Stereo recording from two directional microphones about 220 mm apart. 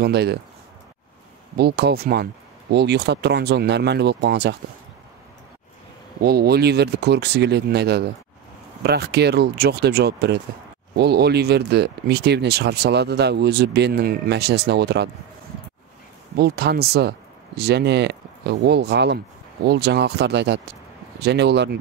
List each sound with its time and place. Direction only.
0.0 s speech: 50° right (ahead or behind)
1.6 s speech: 45° right (ahead or behind)
6.2 s speech: 45° right (ahead or behind)
16.3 s speech: 45° right (ahead or behind)